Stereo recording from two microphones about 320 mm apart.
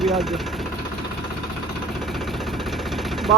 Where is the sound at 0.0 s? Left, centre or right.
Centre.